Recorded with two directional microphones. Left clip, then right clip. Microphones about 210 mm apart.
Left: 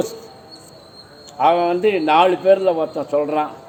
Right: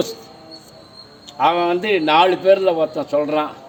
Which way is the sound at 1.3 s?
15° right (ahead or behind).